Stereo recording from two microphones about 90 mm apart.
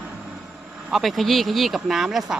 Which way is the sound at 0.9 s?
Centre (ahead or behind).